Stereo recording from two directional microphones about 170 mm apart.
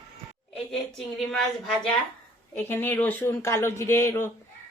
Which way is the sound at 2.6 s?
10° left (ahead or behind).